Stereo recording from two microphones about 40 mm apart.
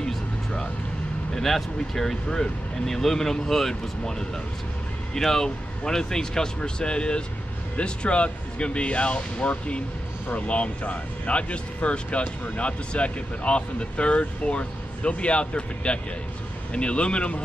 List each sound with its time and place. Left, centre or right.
0.0 s music: centre
1.3 s speech: centre; by 17.4 s left